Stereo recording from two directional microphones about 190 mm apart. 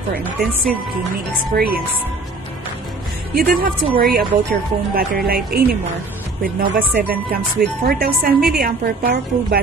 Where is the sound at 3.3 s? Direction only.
50° right (ahead or behind).